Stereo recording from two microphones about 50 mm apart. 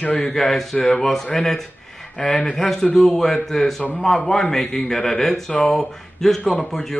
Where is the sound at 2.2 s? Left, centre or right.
Centre.